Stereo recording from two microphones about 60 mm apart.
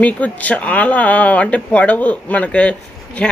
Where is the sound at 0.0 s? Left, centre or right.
Left.